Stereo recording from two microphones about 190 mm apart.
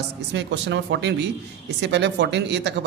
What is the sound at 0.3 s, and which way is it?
A man's voice, 65° right (ahead or behind).